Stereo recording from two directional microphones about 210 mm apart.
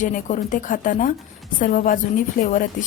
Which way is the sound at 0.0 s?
35° left (ahead or behind).